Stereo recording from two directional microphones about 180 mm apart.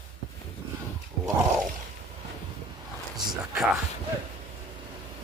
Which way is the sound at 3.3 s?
Centre (ahead or behind).